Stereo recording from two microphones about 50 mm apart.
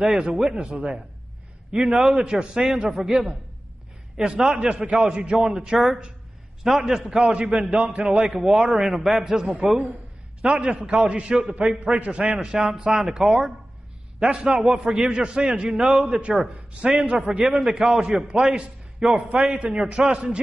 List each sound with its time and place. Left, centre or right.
0.0 s a man's voice: centre
7.0 s a man's voice: centre
10.4 s a man's voice: centre